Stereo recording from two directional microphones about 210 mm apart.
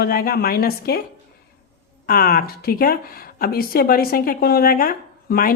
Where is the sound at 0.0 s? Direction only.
45° left (ahead or behind).